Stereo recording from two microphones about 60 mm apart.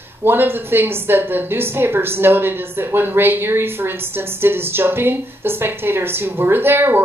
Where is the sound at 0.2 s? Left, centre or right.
Right.